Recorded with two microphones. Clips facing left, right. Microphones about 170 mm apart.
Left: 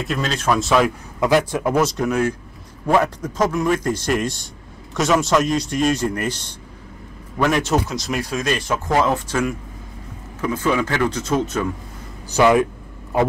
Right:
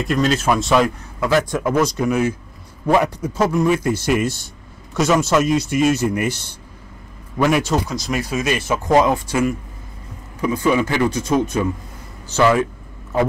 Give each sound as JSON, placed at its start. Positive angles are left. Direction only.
{"t": 0.0, "sound": "a man's voice", "side_deg": 0}
{"t": 7.3, "sound": "a man's voice", "side_deg": -5}
{"t": 12.4, "sound": "speech", "side_deg": 15}